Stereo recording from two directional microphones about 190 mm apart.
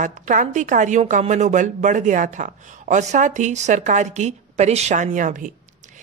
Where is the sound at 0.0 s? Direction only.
40° right (ahead or behind).